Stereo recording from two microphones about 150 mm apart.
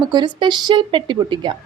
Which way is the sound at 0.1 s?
30° right (ahead or behind).